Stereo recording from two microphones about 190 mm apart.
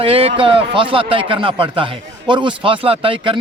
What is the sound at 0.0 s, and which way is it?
Speech, 30° right (ahead or behind).